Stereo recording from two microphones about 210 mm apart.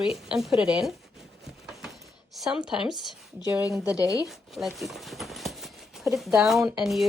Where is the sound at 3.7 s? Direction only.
5° right (ahead or behind).